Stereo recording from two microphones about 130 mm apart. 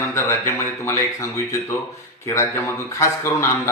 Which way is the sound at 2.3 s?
20° left (ahead or behind).